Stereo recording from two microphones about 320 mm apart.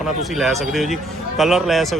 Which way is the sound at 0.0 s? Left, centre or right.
Centre.